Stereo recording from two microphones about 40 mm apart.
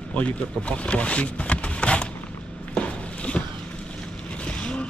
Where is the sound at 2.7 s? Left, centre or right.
Left.